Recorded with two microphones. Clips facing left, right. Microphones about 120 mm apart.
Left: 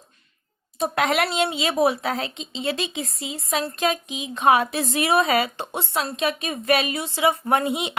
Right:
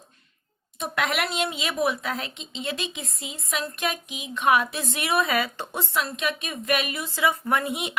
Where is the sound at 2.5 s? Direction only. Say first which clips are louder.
Left 5 dB; 90° left.